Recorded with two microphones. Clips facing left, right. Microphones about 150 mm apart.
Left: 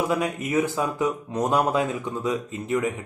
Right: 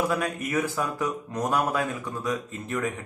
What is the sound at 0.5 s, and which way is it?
Speech, 20° left (ahead or behind).